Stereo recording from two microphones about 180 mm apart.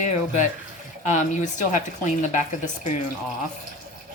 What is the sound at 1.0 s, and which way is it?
A woman's voice, 45° left (ahead or behind).